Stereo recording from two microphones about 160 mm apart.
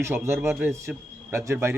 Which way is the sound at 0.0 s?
15° right (ahead or behind).